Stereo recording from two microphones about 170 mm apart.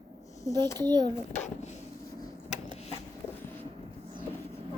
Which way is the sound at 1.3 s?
45° left (ahead or behind).